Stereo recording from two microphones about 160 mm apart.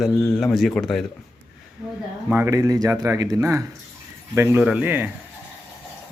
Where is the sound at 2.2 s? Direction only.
15° right (ahead or behind).